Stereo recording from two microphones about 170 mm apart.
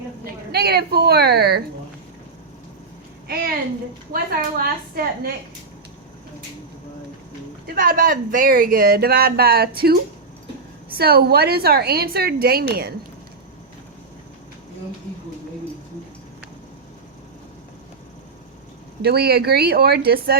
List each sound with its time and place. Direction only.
0.5 s a woman's voice: 70° right (ahead or behind)
3.2 s a sound: 70° right (ahead or behind)
4.1 s speech: 60° right (ahead or behind)
7.7 s speech: 60° right (ahead or behind)
19.0 s a woman's voice: 70° right (ahead or behind)